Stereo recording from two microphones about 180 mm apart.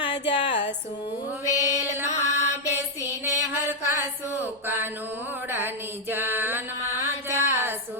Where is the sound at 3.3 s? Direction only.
10° right (ahead or behind).